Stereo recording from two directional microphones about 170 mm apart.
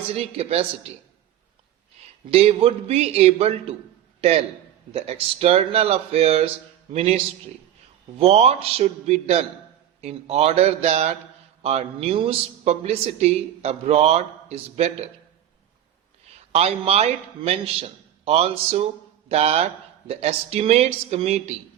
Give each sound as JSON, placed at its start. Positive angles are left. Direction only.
{"t": 0.1, "sound": "speech", "side_deg": -35}
{"t": 2.3, "sound": "a man's voice", "side_deg": -35}
{"t": 8.2, "sound": "speech", "side_deg": -35}
{"t": 16.5, "sound": "speech", "side_deg": -35}